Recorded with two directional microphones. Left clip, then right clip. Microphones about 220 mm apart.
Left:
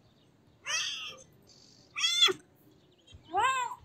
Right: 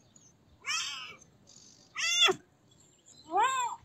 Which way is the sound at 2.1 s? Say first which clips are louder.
Right 1 dB; 20° right (ahead or behind).